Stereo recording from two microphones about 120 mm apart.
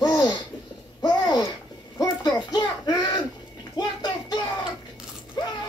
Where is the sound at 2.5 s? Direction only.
35° left (ahead or behind).